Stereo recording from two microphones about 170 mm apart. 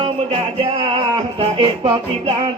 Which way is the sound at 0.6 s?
35° right (ahead or behind).